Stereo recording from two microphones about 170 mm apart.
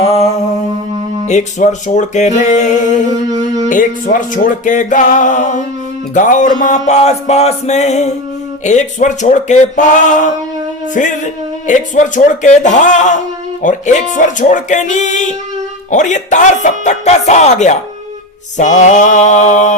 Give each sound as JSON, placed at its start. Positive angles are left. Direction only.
{"t": 0.0, "sound": "music", "side_deg": 35}
{"t": 1.3, "sound": "music", "side_deg": 45}
{"t": 3.1, "sound": "humming", "side_deg": -20}
{"t": 3.7, "sound": "music", "side_deg": 50}
{"t": 18.8, "sound": "music", "side_deg": 45}